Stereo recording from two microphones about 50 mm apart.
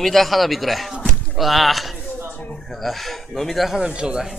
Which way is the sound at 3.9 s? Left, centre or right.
Centre.